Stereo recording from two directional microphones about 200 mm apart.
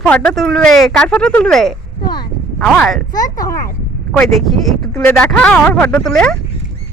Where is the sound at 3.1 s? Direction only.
15° left (ahead or behind).